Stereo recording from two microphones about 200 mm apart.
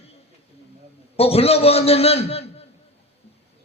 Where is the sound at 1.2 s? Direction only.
30° left (ahead or behind).